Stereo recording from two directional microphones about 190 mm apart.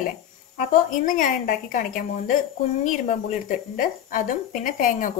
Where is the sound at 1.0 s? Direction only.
45° left (ahead or behind).